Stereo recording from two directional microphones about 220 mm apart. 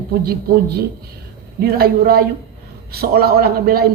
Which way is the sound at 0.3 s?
45° right (ahead or behind).